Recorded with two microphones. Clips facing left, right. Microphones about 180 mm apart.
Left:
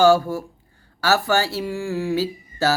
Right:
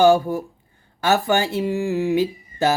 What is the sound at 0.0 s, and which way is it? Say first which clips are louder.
Speech: right 1 dB; 15° right (ahead or behind).